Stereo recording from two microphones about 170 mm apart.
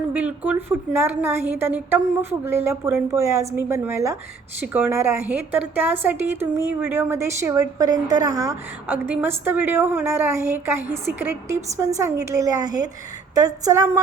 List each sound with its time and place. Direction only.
0.1 s a woman's voice: 10° right (ahead or behind)